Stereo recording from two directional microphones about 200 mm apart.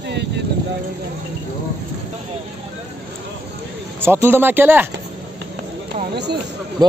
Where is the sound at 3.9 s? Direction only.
10° right (ahead or behind).